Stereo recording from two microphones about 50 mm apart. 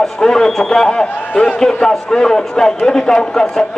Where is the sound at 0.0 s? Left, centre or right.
Centre.